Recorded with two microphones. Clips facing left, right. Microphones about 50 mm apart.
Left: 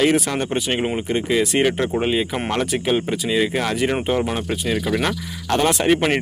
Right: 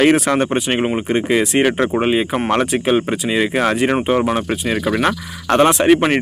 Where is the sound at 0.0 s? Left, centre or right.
Right.